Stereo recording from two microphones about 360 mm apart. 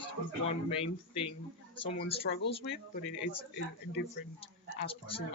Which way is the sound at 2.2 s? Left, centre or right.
Left.